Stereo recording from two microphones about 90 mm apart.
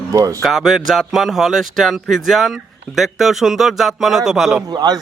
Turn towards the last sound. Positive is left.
turn(degrees=-50)  # may be behind; listen again after turning